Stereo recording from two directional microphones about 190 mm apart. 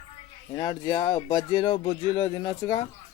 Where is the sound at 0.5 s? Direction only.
25° left (ahead or behind).